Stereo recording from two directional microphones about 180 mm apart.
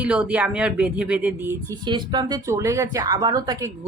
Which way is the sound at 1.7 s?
25° right (ahead or behind).